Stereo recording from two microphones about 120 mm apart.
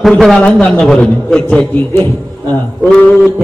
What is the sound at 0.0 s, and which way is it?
A man's voice, centre (ahead or behind).